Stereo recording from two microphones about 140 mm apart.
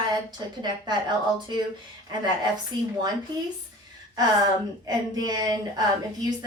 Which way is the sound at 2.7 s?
30° right (ahead or behind).